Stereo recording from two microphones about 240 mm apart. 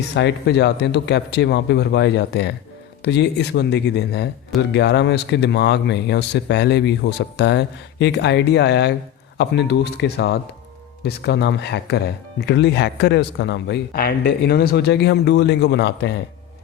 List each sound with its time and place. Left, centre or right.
0.1 s speech: left